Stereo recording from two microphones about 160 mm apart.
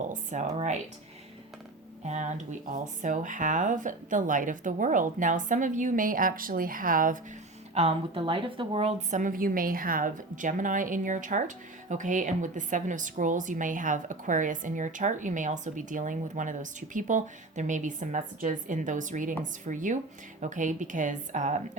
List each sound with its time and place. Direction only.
0.1 s a woman's voice: 50° right (ahead or behind)
2.0 s speech: 50° right (ahead or behind)
7.7 s a woman's voice: 40° right (ahead or behind)